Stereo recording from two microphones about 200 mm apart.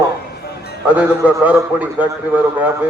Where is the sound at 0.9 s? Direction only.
10° right (ahead or behind).